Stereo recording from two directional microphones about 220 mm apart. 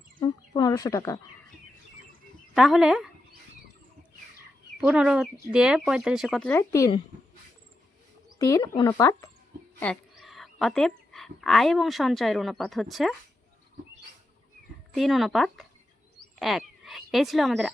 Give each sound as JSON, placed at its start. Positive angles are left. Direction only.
{"t": 0.2, "sound": "speech", "side_deg": 20}
{"t": 2.6, "sound": "speech", "side_deg": 0}
{"t": 4.8, "sound": "speech", "side_deg": -5}
{"t": 8.4, "sound": "speech", "side_deg": 15}
{"t": 9.8, "sound": "speech", "side_deg": 0}
{"t": 14.9, "sound": "speech", "side_deg": 0}